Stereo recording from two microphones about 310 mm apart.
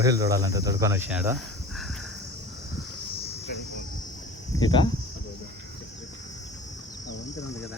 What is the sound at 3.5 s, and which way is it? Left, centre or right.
Cricket, left.